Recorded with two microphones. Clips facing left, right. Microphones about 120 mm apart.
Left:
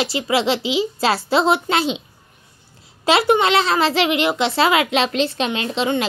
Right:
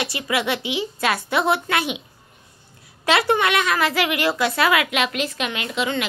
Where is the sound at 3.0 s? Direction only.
25° left (ahead or behind).